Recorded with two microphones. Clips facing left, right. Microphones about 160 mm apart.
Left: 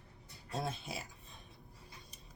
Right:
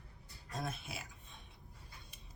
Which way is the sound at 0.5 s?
30° left (ahead or behind).